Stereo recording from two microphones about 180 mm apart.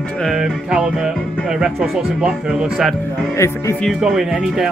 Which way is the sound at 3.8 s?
5° right (ahead or behind).